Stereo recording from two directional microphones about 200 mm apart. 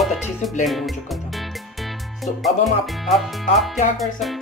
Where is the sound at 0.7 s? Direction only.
Centre (ahead or behind).